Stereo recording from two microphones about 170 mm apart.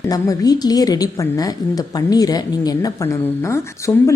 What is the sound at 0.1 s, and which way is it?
A woman's voice, 20° left (ahead or behind).